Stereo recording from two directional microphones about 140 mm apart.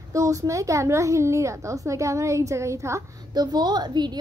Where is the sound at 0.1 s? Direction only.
25° right (ahead or behind).